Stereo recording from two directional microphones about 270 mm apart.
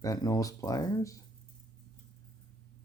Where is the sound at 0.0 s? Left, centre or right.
Centre.